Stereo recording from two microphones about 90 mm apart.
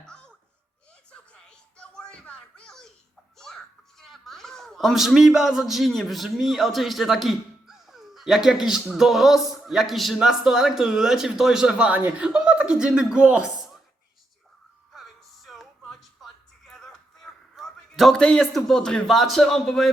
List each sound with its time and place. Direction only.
0.0 s a sound: 10° left (ahead or behind)
1.1 s music: 10° left (ahead or behind)
3.3 s a child's voice: 5° left (ahead or behind)
14.9 s music: centre (ahead or behind)